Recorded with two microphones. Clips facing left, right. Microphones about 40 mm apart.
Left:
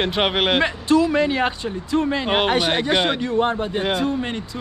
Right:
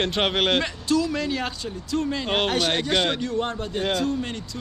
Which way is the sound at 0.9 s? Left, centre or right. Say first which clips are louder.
Left 6 dB; left.